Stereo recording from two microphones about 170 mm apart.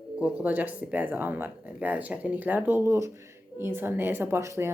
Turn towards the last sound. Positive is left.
turn(degrees=-15)  # may be behind; listen again after turning